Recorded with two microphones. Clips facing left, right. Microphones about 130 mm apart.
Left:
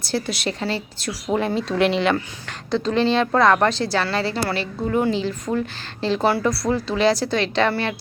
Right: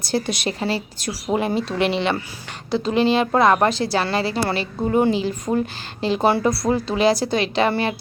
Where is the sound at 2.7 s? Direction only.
10° right (ahead or behind).